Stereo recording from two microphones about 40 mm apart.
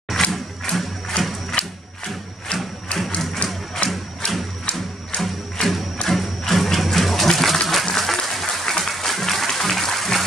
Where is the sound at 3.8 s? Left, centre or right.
Left.